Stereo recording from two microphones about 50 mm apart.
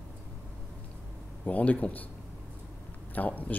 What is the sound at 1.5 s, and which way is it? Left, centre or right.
Speech, left.